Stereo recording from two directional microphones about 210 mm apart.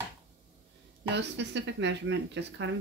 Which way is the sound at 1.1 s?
55° right (ahead or behind).